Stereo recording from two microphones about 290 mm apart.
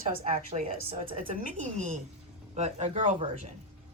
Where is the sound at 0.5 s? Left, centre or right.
Right.